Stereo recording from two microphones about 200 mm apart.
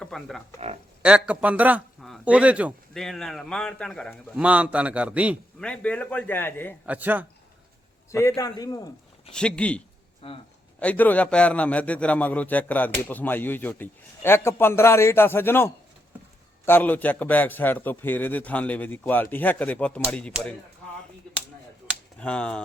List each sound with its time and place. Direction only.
0.0 s a man's voice: centre (ahead or behind)
5.6 s a man's voice: 5° left (ahead or behind)
6.8 s a man's voice: 10° right (ahead or behind)
8.1 s a man's voice: 15° left (ahead or behind)
9.3 s a man's voice: 5° left (ahead or behind)
10.2 s a man's voice: 30° left (ahead or behind)
10.8 s a man's voice: 5° left (ahead or behind)
22.2 s a man's voice: 5° left (ahead or behind)